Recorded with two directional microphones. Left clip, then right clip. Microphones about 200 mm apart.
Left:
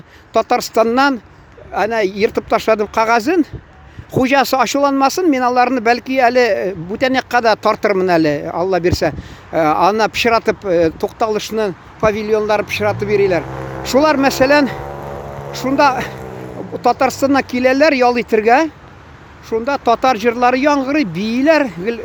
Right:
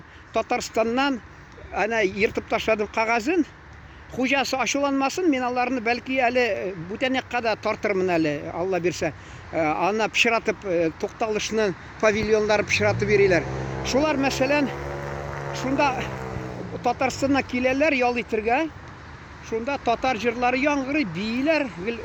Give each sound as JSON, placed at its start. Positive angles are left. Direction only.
{"t": 0.3, "sound": "speech", "side_deg": 30}
{"t": 13.8, "sound": "speech", "side_deg": 35}